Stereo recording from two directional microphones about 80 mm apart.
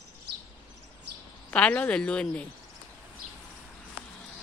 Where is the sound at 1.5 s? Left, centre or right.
Centre.